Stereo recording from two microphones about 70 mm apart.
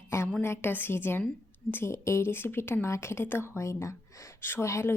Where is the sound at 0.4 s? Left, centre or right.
Left.